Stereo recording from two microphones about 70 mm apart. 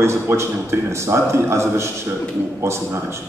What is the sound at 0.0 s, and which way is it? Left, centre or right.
A man's voice, right.